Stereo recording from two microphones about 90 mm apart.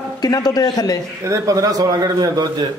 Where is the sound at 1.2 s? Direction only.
35° right (ahead or behind).